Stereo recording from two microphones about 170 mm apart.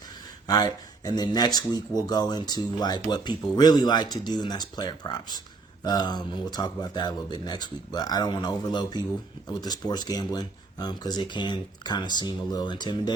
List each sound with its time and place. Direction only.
0.4 s speech: 20° left (ahead or behind)